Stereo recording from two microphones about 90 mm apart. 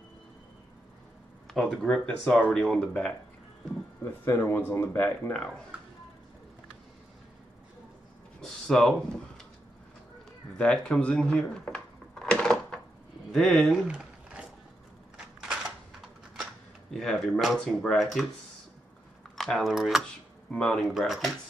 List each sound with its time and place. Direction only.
1.5 s speech: 5° left (ahead or behind)
4.0 s speech: 25° left (ahead or behind)
8.4 s a sound: 5° left (ahead or behind)
10.6 s cash register: 10° left (ahead or behind)
13.3 s speech: centre (ahead or behind)
13.8 s a sound: 10° right (ahead or behind)
16.9 s speech: centre (ahead or behind)
19.3 s speech: centre (ahead or behind)
20.5 s speech: 5° left (ahead or behind)
20.8 s speech: 5° right (ahead or behind)